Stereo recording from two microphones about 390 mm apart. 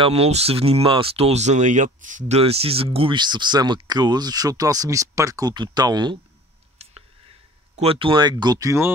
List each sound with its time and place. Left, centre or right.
0.0 s speech: centre
6.8 s a sound: centre
7.7 s speech: centre